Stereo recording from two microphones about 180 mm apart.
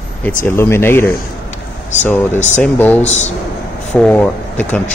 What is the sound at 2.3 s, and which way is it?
Speech, 40° left (ahead or behind).